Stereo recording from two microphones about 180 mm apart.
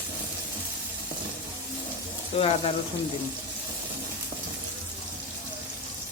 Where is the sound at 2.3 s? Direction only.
30° left (ahead or behind).